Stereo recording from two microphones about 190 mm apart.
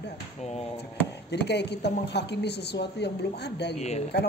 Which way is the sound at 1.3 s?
65° left (ahead or behind).